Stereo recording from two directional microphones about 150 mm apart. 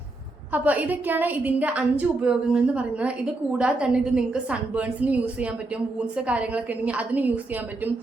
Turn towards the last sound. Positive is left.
turn(degrees=-10)  # may be behind; listen again after turning